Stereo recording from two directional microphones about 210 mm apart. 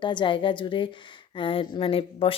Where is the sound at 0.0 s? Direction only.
20° left (ahead or behind).